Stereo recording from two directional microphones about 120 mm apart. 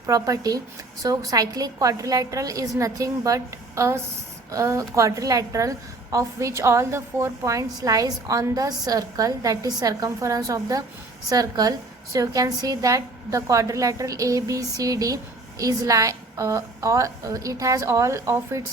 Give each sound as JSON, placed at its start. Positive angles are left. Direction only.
{"t": 0.0, "sound": "a woman's voice", "side_deg": -30}